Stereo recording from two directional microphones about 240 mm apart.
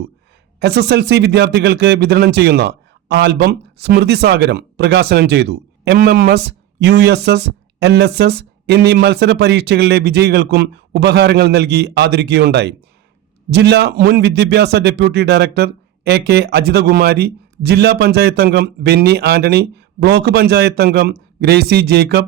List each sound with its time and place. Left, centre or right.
0.6 s speech: right